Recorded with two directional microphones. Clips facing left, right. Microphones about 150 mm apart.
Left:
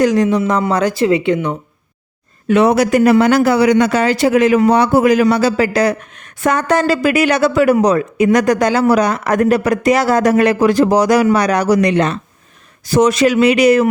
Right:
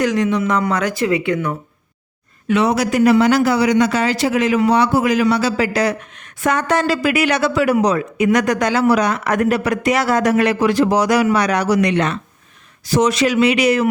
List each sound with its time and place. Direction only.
0.0 s speech: 35° left (ahead or behind)
2.5 s speech: 50° left (ahead or behind)
12.8 s speech: 50° left (ahead or behind)